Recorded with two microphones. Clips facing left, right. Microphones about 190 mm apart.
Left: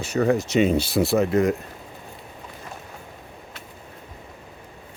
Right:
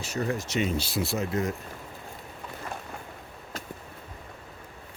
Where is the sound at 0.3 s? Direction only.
80° left.